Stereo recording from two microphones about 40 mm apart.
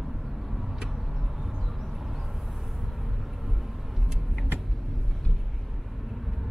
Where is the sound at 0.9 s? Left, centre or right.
Centre.